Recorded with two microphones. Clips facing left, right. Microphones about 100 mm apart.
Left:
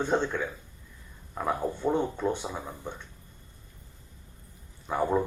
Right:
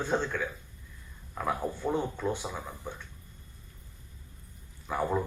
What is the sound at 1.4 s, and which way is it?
Speech, 20° left (ahead or behind).